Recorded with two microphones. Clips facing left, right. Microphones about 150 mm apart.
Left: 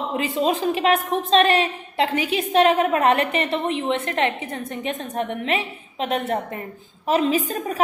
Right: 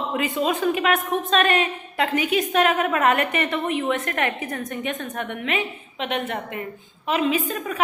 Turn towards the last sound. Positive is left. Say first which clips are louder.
# left 2 dB
turn(degrees=35)  # may be behind; listen again after turning